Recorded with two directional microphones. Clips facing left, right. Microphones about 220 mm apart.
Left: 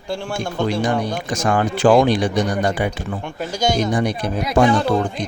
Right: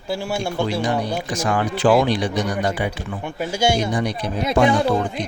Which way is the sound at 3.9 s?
45° left (ahead or behind).